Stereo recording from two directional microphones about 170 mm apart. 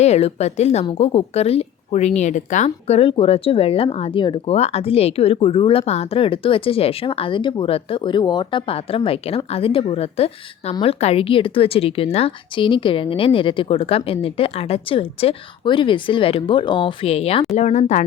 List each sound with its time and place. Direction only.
0.0 s speech: 40° left (ahead or behind)